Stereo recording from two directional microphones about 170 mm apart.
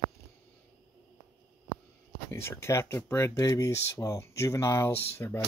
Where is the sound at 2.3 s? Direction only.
15° left (ahead or behind).